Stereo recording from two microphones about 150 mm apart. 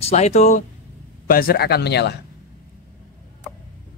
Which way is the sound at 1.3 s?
80° left.